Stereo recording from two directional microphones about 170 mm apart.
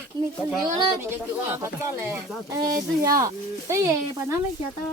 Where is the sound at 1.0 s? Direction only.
15° right (ahead or behind).